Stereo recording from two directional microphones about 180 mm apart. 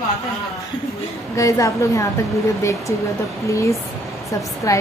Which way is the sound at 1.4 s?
15° left (ahead or behind).